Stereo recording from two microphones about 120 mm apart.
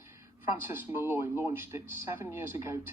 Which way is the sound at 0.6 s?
15° right (ahead or behind).